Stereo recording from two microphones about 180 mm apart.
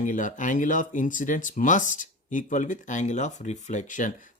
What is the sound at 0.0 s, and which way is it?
Speech, 45° left (ahead or behind).